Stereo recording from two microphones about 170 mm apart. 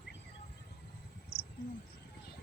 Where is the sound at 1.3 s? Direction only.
60° left (ahead or behind).